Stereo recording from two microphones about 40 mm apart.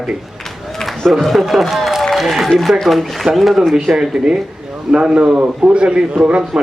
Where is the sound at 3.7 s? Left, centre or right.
Centre.